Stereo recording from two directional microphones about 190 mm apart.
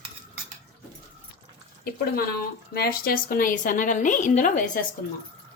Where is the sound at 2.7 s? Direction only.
55° left (ahead or behind).